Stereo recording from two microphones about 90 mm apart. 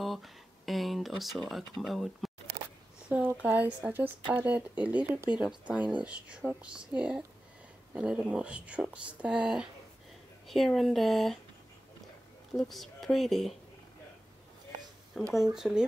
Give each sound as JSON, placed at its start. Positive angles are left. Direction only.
{"t": 0.0, "sound": "a sound", "side_deg": 0}
{"t": 3.1, "sound": "speech", "side_deg": -20}
{"t": 10.5, "sound": "speech", "side_deg": 0}
{"t": 12.5, "sound": "speech", "side_deg": 0}
{"t": 15.2, "sound": "speech", "side_deg": 0}